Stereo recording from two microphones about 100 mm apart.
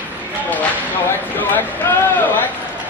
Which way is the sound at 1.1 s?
20° left (ahead or behind).